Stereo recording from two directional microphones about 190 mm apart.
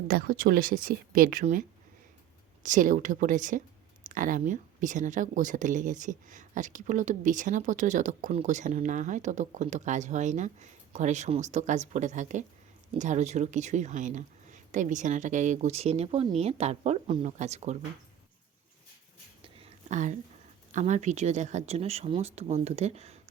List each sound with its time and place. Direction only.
0.1 s speech: 50° right (ahead or behind)
2.6 s speech: 45° right (ahead or behind)
19.4 s a sound: 30° right (ahead or behind)
20.7 s speech: 40° right (ahead or behind)